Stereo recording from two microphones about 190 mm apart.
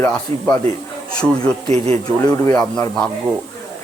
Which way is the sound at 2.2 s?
15° left (ahead or behind).